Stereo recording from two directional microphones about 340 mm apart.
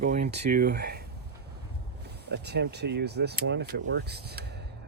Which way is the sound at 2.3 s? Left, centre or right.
Right.